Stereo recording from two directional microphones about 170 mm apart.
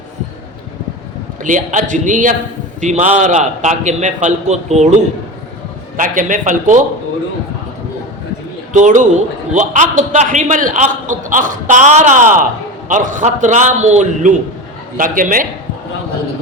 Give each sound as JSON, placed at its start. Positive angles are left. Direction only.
{"t": 1.4, "sound": "a man's voice", "side_deg": -50}
{"t": 6.0, "sound": "a man's voice", "side_deg": -50}
{"t": 8.7, "sound": "a man's voice", "side_deg": -45}